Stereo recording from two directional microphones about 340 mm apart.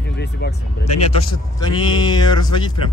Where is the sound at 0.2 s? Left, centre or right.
Left.